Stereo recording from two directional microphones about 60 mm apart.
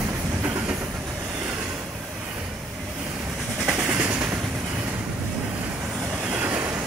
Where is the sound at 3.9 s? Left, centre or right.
Right.